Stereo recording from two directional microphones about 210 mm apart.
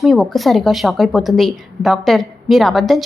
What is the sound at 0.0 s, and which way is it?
A woman's voice, centre (ahead or behind).